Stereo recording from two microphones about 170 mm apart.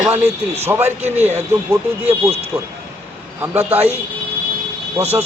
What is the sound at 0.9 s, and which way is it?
Speech, 40° right (ahead or behind).